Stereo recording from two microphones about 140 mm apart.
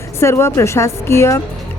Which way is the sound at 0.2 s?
20° left (ahead or behind).